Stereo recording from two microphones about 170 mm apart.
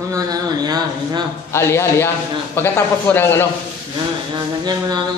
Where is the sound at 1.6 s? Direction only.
15° left (ahead or behind).